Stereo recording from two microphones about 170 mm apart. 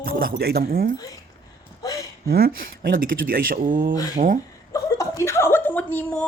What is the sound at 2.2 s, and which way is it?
Speech, 65° right (ahead or behind).